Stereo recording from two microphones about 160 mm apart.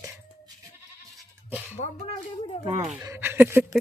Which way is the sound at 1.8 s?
40° left (ahead or behind).